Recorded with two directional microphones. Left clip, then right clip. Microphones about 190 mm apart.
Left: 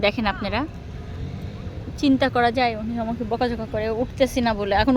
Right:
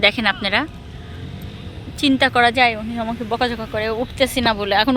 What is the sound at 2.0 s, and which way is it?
Speech, centre (ahead or behind).